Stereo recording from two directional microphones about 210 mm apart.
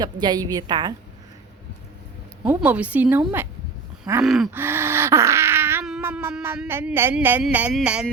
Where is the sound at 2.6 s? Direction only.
5° right (ahead or behind).